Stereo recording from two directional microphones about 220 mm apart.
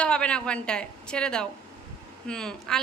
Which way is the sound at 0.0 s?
5° left (ahead or behind).